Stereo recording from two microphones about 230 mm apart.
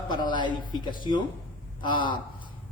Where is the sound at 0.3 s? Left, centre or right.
Left.